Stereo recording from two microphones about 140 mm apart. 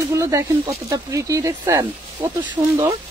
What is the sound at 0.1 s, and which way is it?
A woman's voice, 20° right (ahead or behind).